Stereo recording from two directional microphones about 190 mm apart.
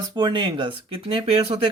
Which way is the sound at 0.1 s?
25° right (ahead or behind).